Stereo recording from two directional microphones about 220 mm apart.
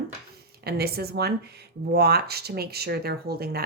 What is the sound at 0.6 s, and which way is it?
Speech, 45° right (ahead or behind).